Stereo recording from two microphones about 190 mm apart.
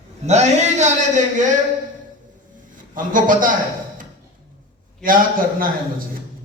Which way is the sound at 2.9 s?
45° right (ahead or behind).